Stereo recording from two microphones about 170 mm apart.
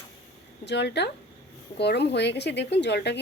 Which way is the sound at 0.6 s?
85° left.